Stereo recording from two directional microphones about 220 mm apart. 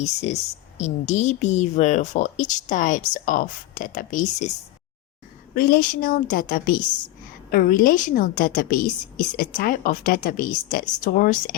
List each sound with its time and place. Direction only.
0.0 s a woman's voice: 30° left (ahead or behind)
5.5 s a woman's voice: 40° left (ahead or behind)